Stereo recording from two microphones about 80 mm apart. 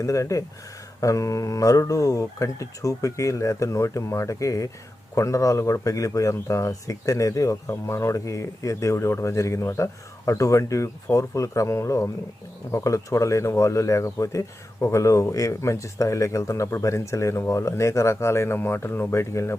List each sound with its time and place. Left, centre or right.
0.0 s speech: left